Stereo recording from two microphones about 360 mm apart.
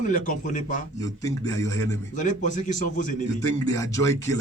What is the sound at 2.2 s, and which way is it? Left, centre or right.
Speech, left.